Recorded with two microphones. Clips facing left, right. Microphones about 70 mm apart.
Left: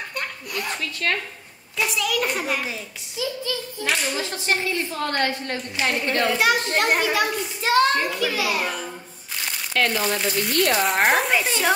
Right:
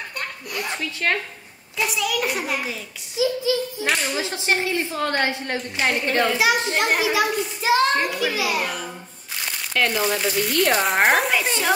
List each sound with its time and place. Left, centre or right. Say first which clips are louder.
0.5 s a sound: right 1 dB; centre
1.0 s speech: right 2 dB; right
1.8 s a child's voice: even; centre
3.2 s a child's voice: right 7 dB; centre
5.8 s a child's voice: right 2 dB; centre
9.9 s a child's voice: right 1 dB; centre